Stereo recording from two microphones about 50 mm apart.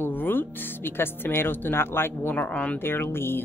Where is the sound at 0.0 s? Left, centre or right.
Left.